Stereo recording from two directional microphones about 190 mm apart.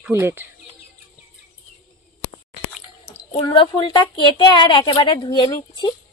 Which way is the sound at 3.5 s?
25° left (ahead or behind).